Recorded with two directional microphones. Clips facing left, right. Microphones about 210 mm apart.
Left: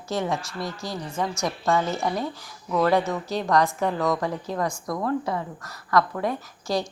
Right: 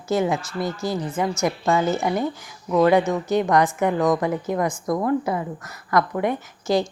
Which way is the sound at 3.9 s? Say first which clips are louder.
Right 5 dB; 20° right (ahead or behind).